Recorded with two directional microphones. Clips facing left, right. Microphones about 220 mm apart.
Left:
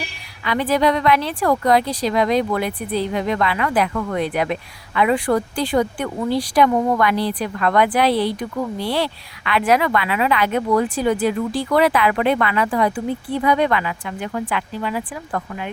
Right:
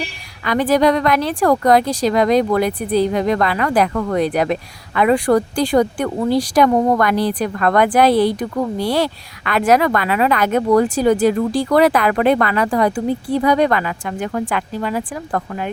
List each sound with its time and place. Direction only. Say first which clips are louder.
0.4 s speech: right 4 dB; 45° right (ahead or behind)